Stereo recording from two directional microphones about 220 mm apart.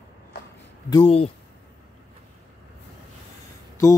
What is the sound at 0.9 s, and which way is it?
Speech, 25° left (ahead or behind).